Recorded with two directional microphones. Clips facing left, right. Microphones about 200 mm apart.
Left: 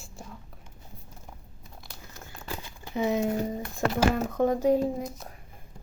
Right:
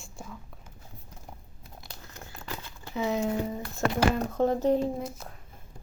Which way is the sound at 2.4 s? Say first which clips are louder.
Left 2 dB; 15° left (ahead or behind).